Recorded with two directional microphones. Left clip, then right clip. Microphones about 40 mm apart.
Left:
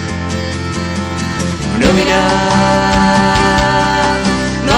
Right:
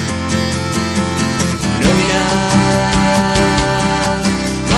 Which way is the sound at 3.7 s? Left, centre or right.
Left.